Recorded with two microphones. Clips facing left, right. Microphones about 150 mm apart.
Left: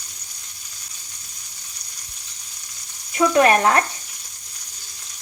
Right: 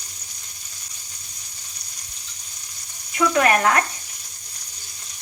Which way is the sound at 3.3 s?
30° left (ahead or behind).